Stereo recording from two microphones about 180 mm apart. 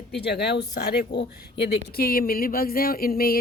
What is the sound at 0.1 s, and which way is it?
Speech, 65° left (ahead or behind).